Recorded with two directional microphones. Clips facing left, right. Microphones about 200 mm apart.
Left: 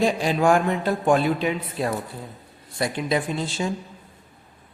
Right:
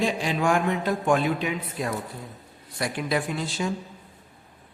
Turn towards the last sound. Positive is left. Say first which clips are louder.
# left 2 dB
turn(degrees=25)  # may be behind; listen again after turning